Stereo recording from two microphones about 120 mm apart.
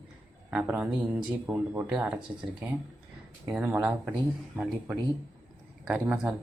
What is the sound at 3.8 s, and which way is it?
A man's voice, 10° right (ahead or behind).